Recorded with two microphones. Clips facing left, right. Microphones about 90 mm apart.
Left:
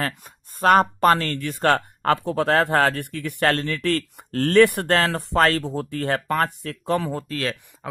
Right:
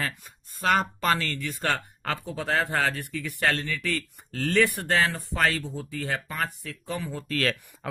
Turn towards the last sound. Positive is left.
turn(degrees=30)  # may be behind; listen again after turning